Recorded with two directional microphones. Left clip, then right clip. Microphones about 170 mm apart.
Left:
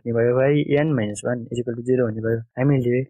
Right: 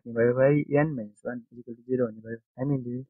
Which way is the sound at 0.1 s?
35° left (ahead or behind).